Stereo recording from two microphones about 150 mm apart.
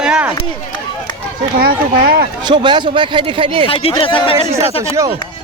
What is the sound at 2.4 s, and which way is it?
Speech, 30° right (ahead or behind).